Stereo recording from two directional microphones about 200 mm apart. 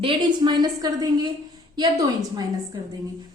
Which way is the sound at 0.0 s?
25° right (ahead or behind).